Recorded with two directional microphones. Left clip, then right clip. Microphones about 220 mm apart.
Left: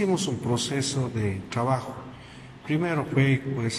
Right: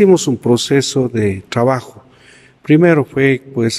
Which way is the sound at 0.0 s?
45° right (ahead or behind).